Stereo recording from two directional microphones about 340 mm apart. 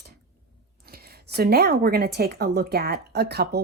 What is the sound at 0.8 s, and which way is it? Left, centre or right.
A woman's voice, right.